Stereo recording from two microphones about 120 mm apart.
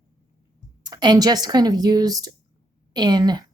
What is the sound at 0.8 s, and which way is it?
Speech, 35° right (ahead or behind).